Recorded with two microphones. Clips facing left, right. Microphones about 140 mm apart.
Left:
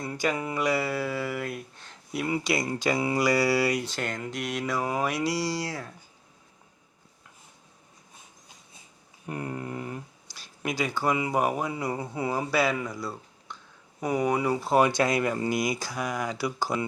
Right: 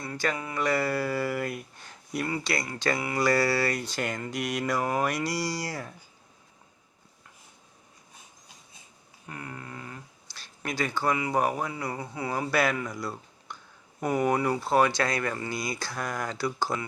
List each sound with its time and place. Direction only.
0.0 s mantra: 15° left (ahead or behind)
0.5 s speech: 10° left (ahead or behind)
2.2 s speech: 15° left (ahead or behind)
3.8 s speech: centre (ahead or behind)
9.2 s a sound: 25° left (ahead or behind)
10.3 s speech: 10° left (ahead or behind)
11.7 s a sound: 20° left (ahead or behind)
12.3 s speech: 5° left (ahead or behind)